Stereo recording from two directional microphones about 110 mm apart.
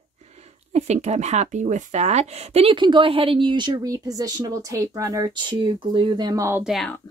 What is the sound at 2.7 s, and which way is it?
Speech, 50° right (ahead or behind).